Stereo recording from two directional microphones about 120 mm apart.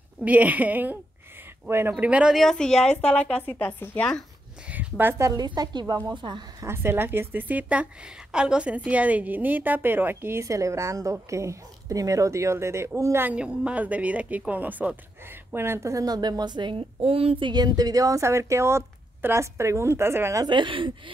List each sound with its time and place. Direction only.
0.2 s a woman's voice: 15° right (ahead or behind); by 4.2 s 10° left (ahead or behind)
4.6 s a woman's voice: 15° right (ahead or behind); by 6.4 s 40° right (ahead or behind)
6.6 s a woman's voice: 20° right (ahead or behind)
13.3 s speech: 10° right (ahead or behind); by 17.5 s 50° right (ahead or behind)
17.5 s a woman's voice: 35° right (ahead or behind)
20.4 s speech: 40° right (ahead or behind)